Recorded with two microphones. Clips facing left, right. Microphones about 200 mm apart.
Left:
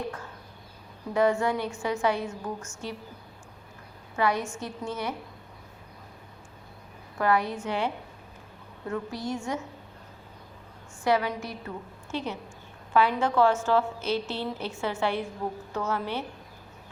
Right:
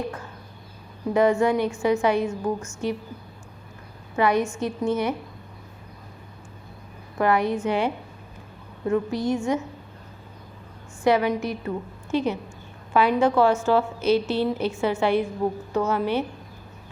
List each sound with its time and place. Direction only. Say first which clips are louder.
1.1 s a woman's voice: right 5 dB; 20° right (ahead or behind)
4.2 s a woman's voice: right 6 dB; 20° right (ahead or behind)
7.2 s a woman's voice: right 4 dB; 20° right (ahead or behind)
8.9 s a woman's voice: right 8 dB; 20° right (ahead or behind)
11.0 s a woman's voice: right 5 dB; 20° right (ahead or behind)